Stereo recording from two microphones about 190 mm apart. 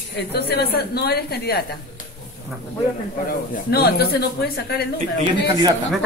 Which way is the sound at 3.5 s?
55° left (ahead or behind).